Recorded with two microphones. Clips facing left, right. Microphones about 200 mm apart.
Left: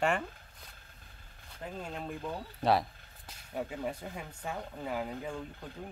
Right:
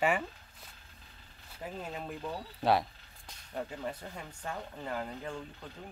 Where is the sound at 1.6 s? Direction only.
5° right (ahead or behind).